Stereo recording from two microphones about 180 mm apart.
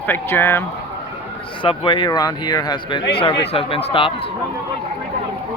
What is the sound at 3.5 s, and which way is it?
Speech, 30° left (ahead or behind).